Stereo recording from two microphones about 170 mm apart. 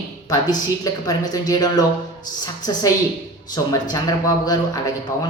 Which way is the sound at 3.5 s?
20° left (ahead or behind).